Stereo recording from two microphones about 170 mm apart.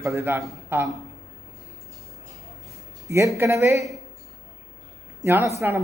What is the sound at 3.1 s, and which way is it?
Speech, 15° right (ahead or behind).